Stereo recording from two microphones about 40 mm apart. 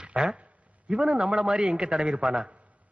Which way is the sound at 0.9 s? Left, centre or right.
Right.